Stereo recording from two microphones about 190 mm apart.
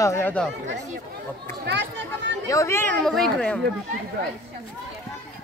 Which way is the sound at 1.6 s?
65° right (ahead or behind).